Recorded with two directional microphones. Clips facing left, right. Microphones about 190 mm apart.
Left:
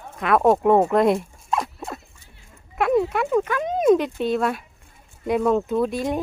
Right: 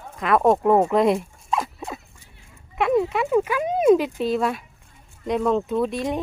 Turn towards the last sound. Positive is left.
turn(degrees=0)  # may be behind; listen again after turning